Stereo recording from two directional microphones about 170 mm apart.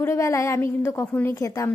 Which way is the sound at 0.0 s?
15° left (ahead or behind).